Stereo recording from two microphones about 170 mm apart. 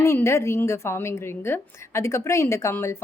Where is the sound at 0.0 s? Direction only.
15° left (ahead or behind).